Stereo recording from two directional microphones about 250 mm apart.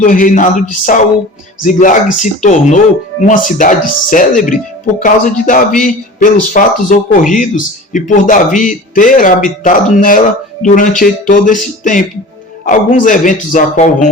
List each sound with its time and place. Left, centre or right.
0.0 s speech: left